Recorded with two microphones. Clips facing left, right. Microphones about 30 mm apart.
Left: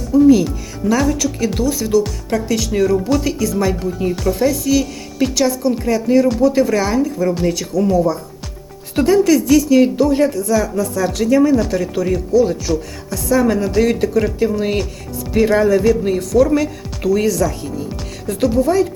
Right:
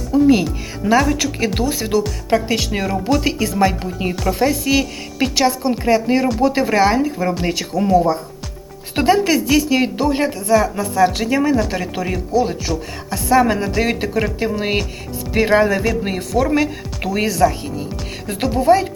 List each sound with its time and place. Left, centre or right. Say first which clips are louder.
0.1 s speech: left 3 dB; right